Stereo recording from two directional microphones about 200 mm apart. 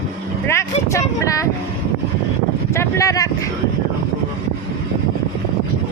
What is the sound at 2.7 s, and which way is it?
Speech, 15° left (ahead or behind).